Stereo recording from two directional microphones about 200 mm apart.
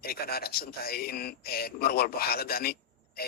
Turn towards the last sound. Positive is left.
turn(degrees=50)  # may be behind; listen again after turning